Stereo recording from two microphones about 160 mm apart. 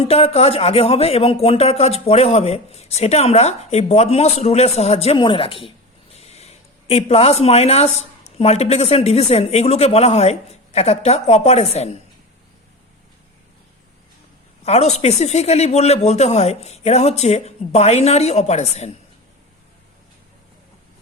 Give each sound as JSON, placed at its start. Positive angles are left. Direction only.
{"t": 0.0, "sound": "a man's voice", "side_deg": 35}
{"t": 14.6, "sound": "speech", "side_deg": 40}